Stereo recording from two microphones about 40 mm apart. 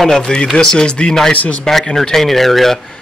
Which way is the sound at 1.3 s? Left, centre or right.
Left.